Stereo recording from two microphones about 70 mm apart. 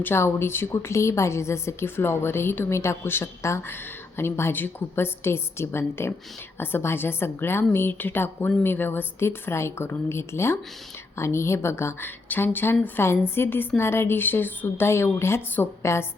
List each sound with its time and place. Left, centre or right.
0.0 s a woman's voice: left